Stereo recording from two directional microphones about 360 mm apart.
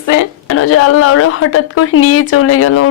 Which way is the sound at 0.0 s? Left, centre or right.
Left.